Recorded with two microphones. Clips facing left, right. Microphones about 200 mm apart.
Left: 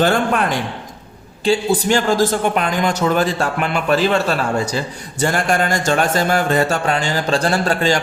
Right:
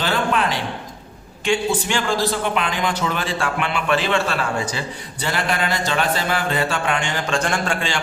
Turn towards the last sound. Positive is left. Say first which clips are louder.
# left 6 dB
turn(degrees=40)  # may be behind; listen again after turning